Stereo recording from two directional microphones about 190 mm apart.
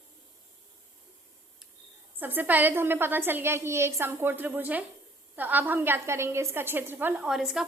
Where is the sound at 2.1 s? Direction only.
10° right (ahead or behind).